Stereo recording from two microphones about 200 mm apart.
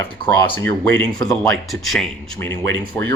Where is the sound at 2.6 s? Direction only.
65° right (ahead or behind).